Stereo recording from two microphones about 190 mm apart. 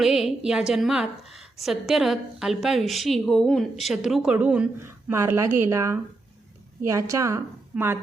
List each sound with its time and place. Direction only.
0.0 s a woman's voice: centre (ahead or behind)